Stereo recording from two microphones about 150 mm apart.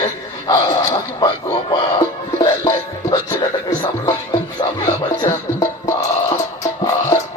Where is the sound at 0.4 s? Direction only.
25° left (ahead or behind).